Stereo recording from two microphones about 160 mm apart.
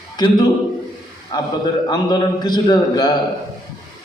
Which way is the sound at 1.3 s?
25° left (ahead or behind).